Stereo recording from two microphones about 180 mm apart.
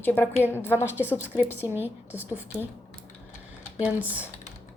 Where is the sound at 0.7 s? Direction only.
10° right (ahead or behind).